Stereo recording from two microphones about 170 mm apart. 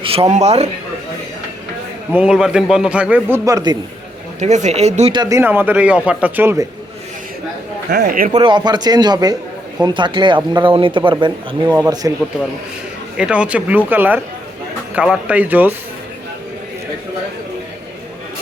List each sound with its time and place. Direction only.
0.0 s speech: 35° right (ahead or behind)
2.1 s a man's voice: 5° right (ahead or behind); by 3.8 s 20° right (ahead or behind)
4.4 s speech: 45° right (ahead or behind)
5.1 s speech: 25° right (ahead or behind)
5.4 s a man's voice: 10° right (ahead or behind)
7.9 s speech: 60° right (ahead or behind)
8.3 s speech: 25° right (ahead or behind)
13.1 s a man's voice: 5° right (ahead or behind)